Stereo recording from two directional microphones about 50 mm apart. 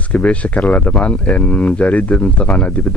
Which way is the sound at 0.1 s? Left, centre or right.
Left.